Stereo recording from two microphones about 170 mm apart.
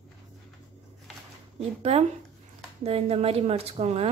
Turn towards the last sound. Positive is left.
turn(degrees=-40)  # may be behind; listen again after turning